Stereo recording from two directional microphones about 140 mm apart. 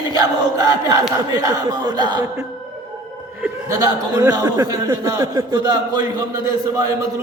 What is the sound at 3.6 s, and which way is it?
Speech, 25° right (ahead or behind).